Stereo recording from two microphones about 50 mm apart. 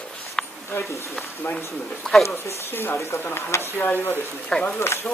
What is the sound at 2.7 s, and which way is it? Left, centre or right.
Speech, left.